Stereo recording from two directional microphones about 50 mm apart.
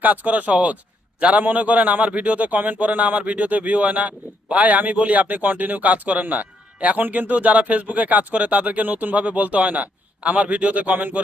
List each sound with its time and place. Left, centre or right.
0.0 s a man's voice: right